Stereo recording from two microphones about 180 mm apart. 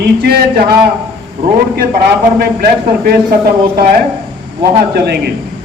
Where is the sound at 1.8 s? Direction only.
60° right (ahead or behind).